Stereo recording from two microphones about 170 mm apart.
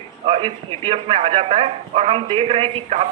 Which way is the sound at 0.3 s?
35° right (ahead or behind).